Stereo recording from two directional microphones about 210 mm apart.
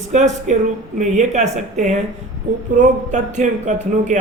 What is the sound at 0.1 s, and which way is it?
Speech, 35° right (ahead or behind).